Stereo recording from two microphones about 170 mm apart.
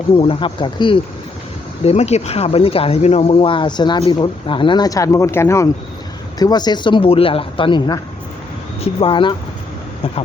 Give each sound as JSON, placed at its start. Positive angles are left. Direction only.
{"t": 0.2, "sound": "speech", "side_deg": 30}